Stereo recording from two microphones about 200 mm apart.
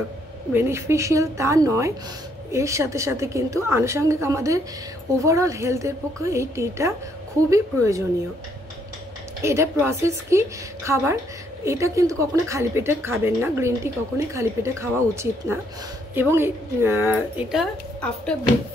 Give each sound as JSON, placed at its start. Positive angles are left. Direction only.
{"t": 0.5, "sound": "speech", "side_deg": -10}
{"t": 9.4, "sound": "speech", "side_deg": -15}